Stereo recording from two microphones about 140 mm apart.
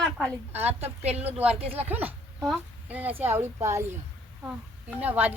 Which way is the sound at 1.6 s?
45° right (ahead or behind).